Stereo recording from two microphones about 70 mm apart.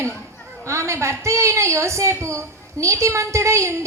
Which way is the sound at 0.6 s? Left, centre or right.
Right.